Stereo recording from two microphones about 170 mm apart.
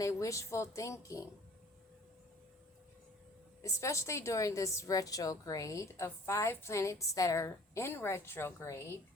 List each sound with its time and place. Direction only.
0.0 s a woman's voice: 20° left (ahead or behind)
3.6 s a woman's voice: 20° left (ahead or behind)